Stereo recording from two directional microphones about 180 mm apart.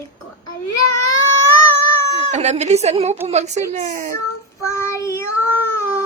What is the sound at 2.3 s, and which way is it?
Speech, 40° right (ahead or behind).